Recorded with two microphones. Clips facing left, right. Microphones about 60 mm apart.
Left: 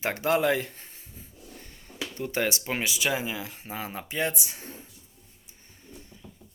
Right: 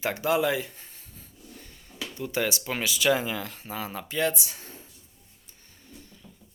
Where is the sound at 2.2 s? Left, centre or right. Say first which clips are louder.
Even; left; by 3.6 s centre.